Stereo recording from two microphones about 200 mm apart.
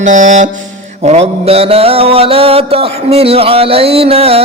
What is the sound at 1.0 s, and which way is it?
Mantra, 30° right (ahead or behind).